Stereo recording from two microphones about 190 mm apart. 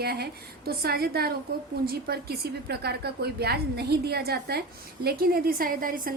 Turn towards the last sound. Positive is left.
turn(degrees=-50)  # may be behind; listen again after turning